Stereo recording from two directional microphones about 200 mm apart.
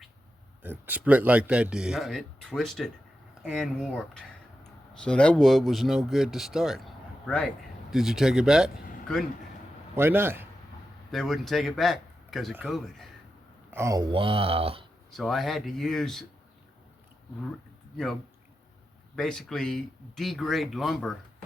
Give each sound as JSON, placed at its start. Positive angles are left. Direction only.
{"t": 0.6, "sound": "speech", "side_deg": -10}
{"t": 9.9, "sound": "a man's voice", "side_deg": -10}
{"t": 11.1, "sound": "speech", "side_deg": 0}
{"t": 13.7, "sound": "speech", "side_deg": -15}
{"t": 15.1, "sound": "speech", "side_deg": 0}
{"t": 17.9, "sound": "speech", "side_deg": 0}